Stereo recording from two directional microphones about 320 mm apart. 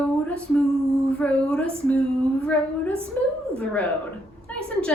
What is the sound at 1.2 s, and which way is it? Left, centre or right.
Speech, centre.